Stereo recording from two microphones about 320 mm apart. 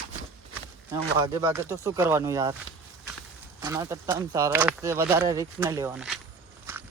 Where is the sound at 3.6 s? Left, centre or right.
Centre.